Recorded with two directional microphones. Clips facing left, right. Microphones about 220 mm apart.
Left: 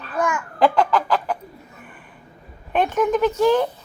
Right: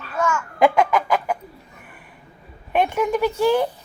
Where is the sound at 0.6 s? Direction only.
10° right (ahead or behind).